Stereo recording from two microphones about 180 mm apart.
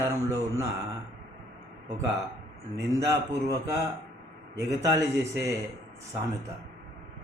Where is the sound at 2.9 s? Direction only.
20° right (ahead or behind).